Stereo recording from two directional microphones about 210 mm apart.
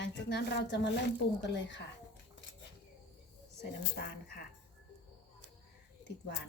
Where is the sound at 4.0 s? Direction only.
50° left (ahead or behind).